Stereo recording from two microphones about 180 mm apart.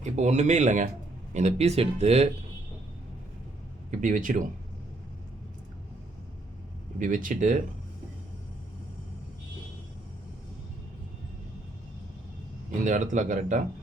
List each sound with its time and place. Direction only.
0.0 s speech: 40° right (ahead or behind)
3.9 s speech: 45° right (ahead or behind)
7.0 s speech: 50° right (ahead or behind)
12.8 s speech: 45° right (ahead or behind)